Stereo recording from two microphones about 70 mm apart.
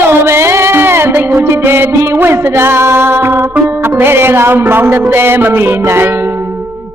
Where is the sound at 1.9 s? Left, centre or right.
Right.